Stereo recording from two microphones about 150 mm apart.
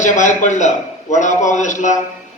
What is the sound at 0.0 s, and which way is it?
A man's voice, 55° left (ahead or behind).